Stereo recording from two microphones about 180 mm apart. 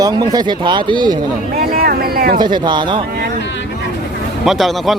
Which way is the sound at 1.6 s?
55° right (ahead or behind).